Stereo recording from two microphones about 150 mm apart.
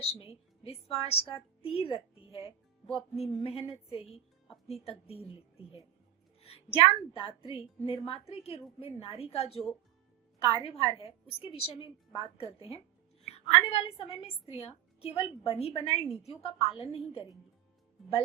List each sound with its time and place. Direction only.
0.0 s a woman's voice: 40° left (ahead or behind)
6.4 s a woman's voice: 40° left (ahead or behind)